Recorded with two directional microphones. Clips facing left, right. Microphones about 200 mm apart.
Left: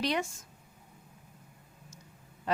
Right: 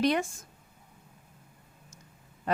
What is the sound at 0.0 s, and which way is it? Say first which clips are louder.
Speech: right 5 dB; 50° right (ahead or behind).